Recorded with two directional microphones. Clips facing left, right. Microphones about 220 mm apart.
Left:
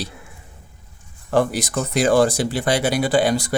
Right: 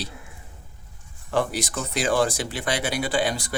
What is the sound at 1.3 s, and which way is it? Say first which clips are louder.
Speech: left 6 dB; 40° left (ahead or behind).